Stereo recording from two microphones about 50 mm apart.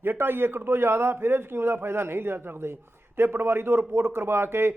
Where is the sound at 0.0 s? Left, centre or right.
Right.